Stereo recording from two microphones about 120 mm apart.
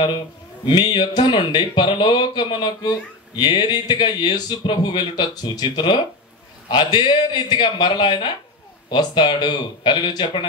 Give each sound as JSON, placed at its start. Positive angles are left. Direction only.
{"t": 0.7, "sound": "a man's voice", "side_deg": 45}